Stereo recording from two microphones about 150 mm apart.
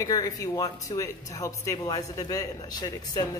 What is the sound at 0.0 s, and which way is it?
Speech, 25° left (ahead or behind).